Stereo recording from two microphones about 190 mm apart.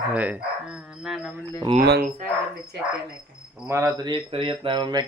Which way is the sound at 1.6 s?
30° right (ahead or behind).